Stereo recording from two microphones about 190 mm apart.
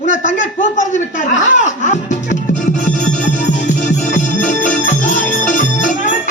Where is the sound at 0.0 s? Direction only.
40° left (ahead or behind).